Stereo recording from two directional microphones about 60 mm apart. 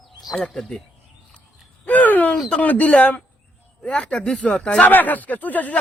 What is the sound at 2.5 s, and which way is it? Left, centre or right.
Speech, left.